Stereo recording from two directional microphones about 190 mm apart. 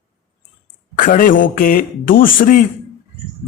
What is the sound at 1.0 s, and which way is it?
A man's voice, 45° left (ahead or behind).